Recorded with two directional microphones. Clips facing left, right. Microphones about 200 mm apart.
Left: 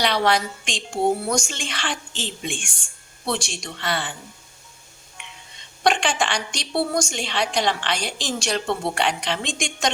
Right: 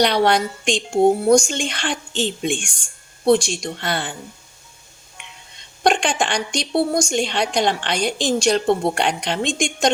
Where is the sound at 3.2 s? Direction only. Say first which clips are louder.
Right 11 dB; 45° right (ahead or behind).